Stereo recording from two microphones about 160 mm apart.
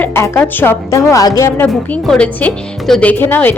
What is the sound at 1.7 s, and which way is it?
Speech, 5° left (ahead or behind).